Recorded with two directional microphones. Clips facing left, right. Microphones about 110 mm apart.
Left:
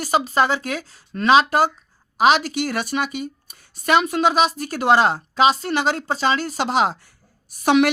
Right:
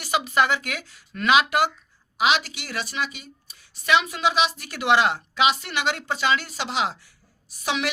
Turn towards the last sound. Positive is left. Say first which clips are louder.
# left 10 dB
turn(degrees=55)  # may be behind; listen again after turning